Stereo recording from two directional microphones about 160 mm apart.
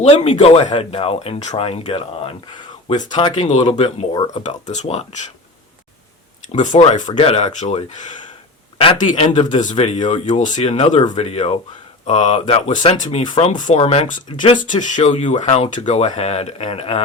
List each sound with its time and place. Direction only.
0.0 s speech: 40° left (ahead or behind)
3.3 s speech: 50° left (ahead or behind)
4.1 s speech: 30° left (ahead or behind)
4.4 s speech: 45° left (ahead or behind)
6.5 s speech: 50° left (ahead or behind)
7.1 s speech: 35° left (ahead or behind)
10.6 s speech: 40° left (ahead or behind)
13.8 s speech: 40° left (ahead or behind)
14.6 s speech: 50° left (ahead or behind)